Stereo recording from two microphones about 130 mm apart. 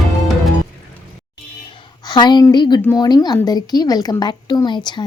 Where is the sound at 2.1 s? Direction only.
35° left (ahead or behind).